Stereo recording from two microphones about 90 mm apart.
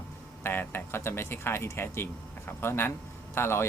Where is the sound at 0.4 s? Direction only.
25° left (ahead or behind).